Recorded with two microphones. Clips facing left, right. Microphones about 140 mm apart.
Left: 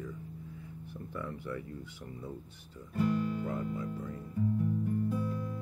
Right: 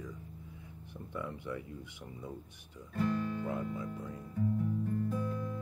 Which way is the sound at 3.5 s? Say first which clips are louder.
Left 1 dB; 15° right (ahead or behind).